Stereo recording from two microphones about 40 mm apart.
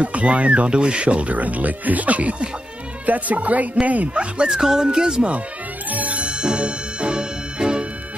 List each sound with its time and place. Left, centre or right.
0.0 s speech: right
4.5 s speech: centre
5.9 s music: right
6.4 s music: right